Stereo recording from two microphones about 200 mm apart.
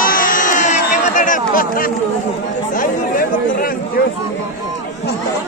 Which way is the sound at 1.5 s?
45° left (ahead or behind).